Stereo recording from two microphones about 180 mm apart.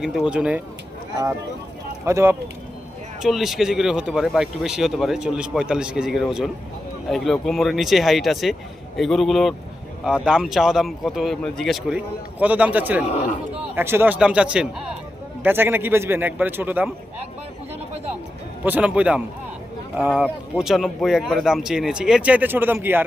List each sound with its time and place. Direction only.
0.0 s speech: centre (ahead or behind)
2.0 s speech: 15° right (ahead or behind)
3.2 s speech: centre (ahead or behind)
18.6 s speech: 10° right (ahead or behind)